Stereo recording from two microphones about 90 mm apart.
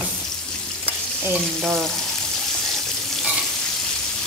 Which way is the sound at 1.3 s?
10° right (ahead or behind).